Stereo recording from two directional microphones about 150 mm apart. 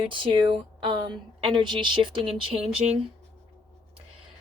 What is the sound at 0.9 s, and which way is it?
Speech, 30° right (ahead or behind).